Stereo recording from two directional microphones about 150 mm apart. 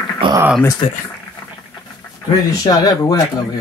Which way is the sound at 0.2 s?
35° right (ahead or behind).